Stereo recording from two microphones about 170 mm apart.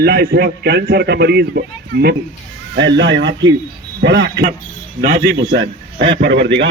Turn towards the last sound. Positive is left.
turn(degrees=-90)